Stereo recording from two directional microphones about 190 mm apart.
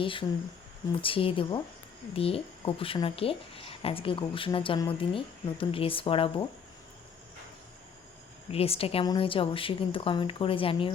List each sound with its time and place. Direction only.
0.0 s speech: 25° left (ahead or behind)
8.5 s speech: 30° left (ahead or behind)